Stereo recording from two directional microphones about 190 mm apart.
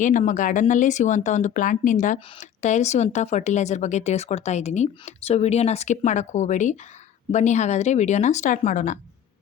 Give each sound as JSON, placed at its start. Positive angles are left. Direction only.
{"t": 0.0, "sound": "speech", "side_deg": 40}